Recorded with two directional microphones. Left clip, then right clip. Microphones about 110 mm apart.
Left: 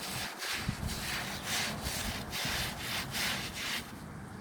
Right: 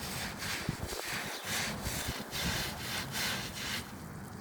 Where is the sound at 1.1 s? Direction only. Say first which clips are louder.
Left 2 dB; 45° right (ahead or behind).